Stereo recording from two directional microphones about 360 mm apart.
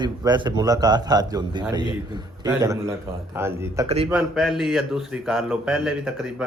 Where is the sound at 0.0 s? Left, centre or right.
Centre.